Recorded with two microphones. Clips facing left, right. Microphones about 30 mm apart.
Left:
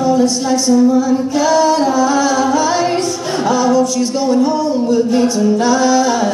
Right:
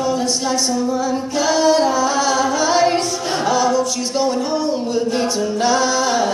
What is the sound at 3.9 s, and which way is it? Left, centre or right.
A capella, centre.